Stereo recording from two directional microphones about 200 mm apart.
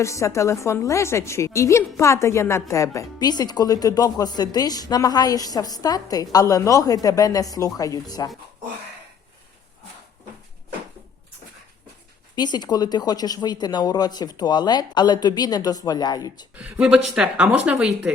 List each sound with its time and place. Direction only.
0.0 s a woman's voice: 15° left (ahead or behind)
12.4 s speech: 20° left (ahead or behind)
16.6 s speech: 5° right (ahead or behind)